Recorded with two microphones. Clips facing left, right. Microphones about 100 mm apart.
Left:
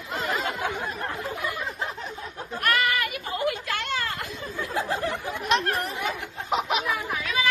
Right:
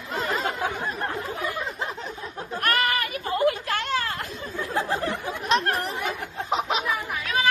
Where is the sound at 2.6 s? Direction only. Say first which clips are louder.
Even; 45° right (ahead or behind).